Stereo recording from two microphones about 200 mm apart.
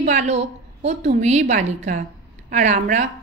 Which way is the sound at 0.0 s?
35° right (ahead or behind).